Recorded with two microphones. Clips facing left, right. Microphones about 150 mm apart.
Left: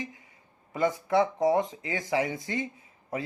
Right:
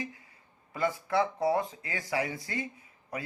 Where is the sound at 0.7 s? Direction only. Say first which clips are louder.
Left 4 dB; 20° left (ahead or behind).